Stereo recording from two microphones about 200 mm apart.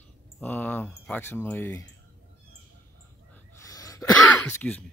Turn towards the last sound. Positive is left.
turn(degrees=10)  # may be behind; listen again after turning